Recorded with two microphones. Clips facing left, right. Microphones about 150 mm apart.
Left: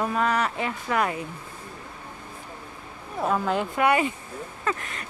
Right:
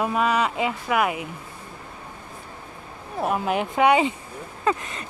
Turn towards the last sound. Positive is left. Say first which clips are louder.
# right 5 dB
turn(degrees=-25)  # may be behind; listen again after turning